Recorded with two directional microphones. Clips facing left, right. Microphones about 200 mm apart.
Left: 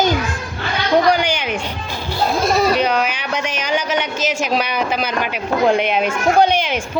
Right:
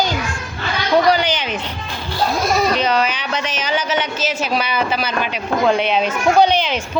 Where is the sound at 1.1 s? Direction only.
15° left (ahead or behind).